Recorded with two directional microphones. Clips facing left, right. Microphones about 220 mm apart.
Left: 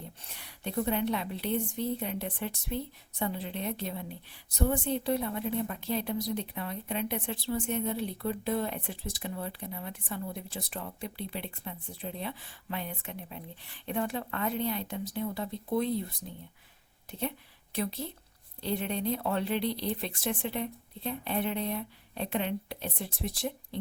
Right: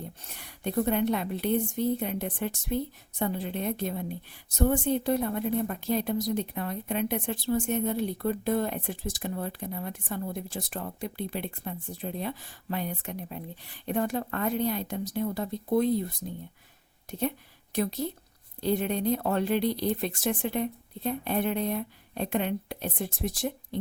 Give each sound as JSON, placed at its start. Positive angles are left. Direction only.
{"t": 0.3, "sound": "a woman's voice", "side_deg": -50}
{"t": 17.1, "sound": "a woman's voice", "side_deg": -45}